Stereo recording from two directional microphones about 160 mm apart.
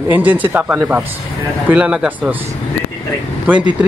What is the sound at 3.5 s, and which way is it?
Speech, 10° right (ahead or behind).